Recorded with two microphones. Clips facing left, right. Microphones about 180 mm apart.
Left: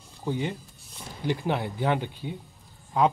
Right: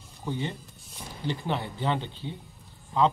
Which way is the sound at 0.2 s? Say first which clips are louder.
Left 3 dB; 15° left (ahead or behind).